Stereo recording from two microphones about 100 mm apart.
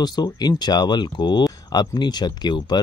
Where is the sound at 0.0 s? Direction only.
45° left (ahead or behind).